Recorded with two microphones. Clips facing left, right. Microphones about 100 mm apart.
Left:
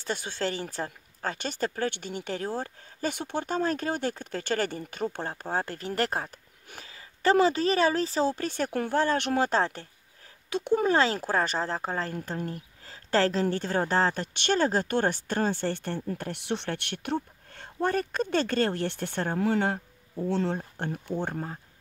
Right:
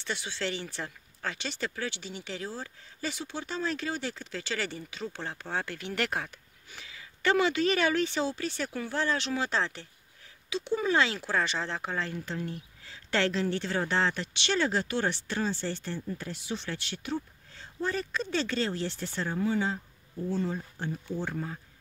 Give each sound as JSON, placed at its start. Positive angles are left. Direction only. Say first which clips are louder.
{"t": 0.0, "sound": "speech", "louder": "left 4 dB", "side_deg": 45}
{"t": 20.5, "sound": "speech", "louder": "left 2 dB", "side_deg": 55}